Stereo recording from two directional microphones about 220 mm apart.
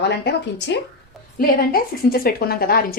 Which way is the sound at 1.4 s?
40° left (ahead or behind).